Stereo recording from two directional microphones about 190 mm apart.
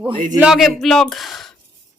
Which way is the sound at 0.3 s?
5° right (ahead or behind).